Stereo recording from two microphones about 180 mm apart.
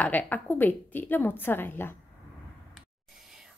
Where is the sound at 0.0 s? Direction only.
10° left (ahead or behind).